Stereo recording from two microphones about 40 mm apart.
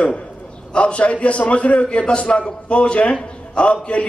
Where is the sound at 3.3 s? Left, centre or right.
Left.